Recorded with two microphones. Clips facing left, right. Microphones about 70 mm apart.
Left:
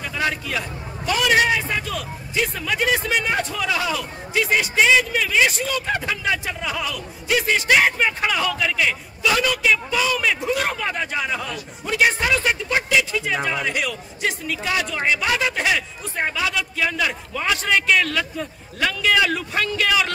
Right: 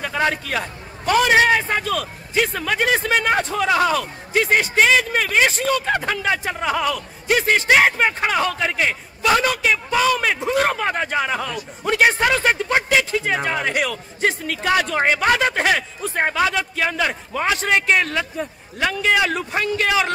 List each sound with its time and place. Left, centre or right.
0.0 s a man's voice: right